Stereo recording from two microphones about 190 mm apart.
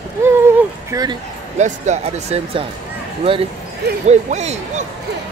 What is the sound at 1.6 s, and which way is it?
Speech, 35° right (ahead or behind).